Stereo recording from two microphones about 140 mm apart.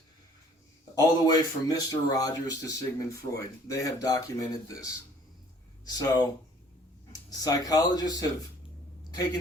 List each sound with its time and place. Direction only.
0.9 s speech: 25° left (ahead or behind)
5.8 s speech: 25° left (ahead or behind)